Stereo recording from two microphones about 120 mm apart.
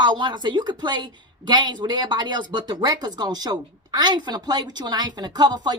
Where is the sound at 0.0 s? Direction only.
40° right (ahead or behind).